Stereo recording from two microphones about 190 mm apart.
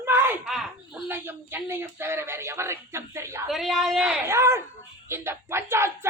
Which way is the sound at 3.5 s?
Centre (ahead or behind).